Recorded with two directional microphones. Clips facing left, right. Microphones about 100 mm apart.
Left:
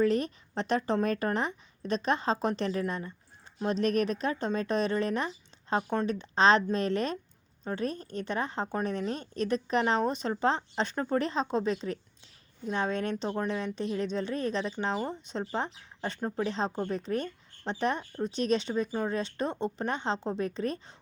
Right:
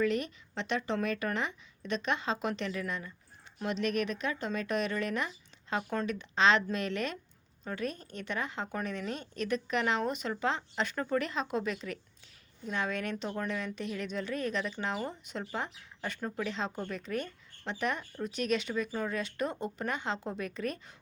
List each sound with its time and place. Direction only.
0.0 s a woman's voice: 35° left (ahead or behind)